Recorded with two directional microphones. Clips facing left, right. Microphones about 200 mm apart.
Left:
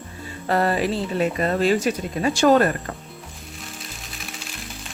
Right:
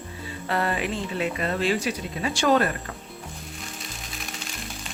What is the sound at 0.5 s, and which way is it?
Speech, 40° left (ahead or behind).